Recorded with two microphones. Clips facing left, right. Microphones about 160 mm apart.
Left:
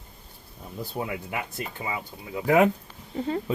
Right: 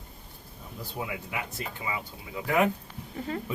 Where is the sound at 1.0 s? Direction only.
50° left (ahead or behind).